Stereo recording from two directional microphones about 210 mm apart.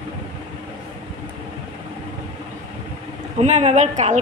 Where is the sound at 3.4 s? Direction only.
35° right (ahead or behind).